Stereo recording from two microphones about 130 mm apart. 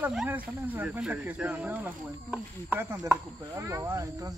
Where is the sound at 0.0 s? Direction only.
10° right (ahead or behind).